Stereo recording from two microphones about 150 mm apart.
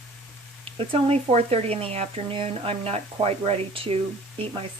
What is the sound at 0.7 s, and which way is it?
Speech, 40° right (ahead or behind).